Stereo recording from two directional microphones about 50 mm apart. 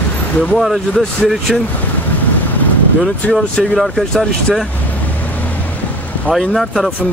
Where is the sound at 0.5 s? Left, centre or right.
Centre.